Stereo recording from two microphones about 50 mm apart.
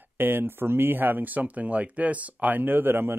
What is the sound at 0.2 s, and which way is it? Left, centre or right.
Speech, right.